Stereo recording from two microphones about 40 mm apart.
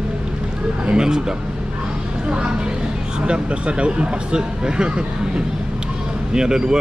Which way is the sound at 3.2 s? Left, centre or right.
Right.